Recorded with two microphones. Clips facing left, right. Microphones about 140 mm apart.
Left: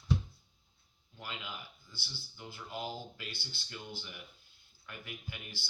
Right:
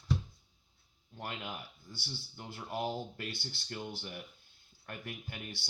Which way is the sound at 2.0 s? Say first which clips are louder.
Right 3 dB; 45° right (ahead or behind).